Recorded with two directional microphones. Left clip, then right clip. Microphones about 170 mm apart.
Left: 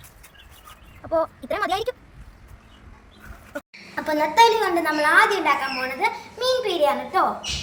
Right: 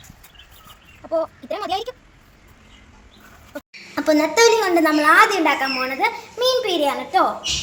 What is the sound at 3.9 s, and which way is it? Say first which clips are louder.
A woman's voice: right 1 dB; 60° right (ahead or behind).